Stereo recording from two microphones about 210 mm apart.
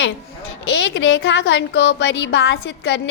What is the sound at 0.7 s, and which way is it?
Speech, 60° left (ahead or behind).